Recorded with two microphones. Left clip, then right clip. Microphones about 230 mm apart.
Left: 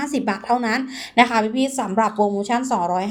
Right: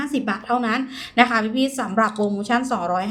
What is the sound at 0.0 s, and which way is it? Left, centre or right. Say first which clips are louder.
A woman's voice: left 1 dB; centre.